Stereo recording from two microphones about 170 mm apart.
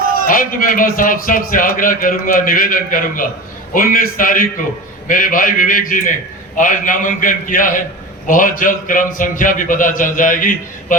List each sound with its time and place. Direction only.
0.3 s a man's voice: 55° left (ahead or behind)